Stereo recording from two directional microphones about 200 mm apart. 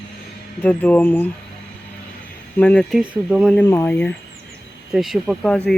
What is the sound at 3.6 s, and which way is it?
Speech, 10° left (ahead or behind).